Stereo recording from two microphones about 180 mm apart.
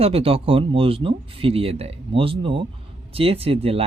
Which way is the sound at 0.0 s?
30° right (ahead or behind).